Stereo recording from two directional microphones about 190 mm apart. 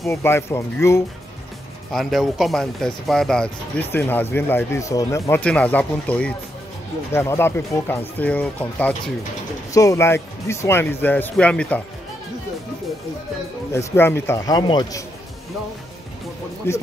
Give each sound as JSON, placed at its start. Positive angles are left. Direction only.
{"t": 0.1, "sound": "speech", "side_deg": 10}
{"t": 1.9, "sound": "speech", "side_deg": 0}
{"t": 13.7, "sound": "speech", "side_deg": 10}
{"t": 16.6, "sound": "speech", "side_deg": 15}